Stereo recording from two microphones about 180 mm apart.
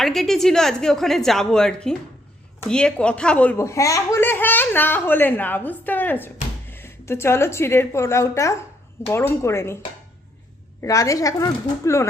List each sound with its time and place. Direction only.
0.0 s a woman's voice: centre (ahead or behind)
10.8 s speech: 15° left (ahead or behind)